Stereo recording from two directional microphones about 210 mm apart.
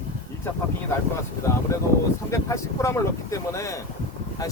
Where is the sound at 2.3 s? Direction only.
15° left (ahead or behind).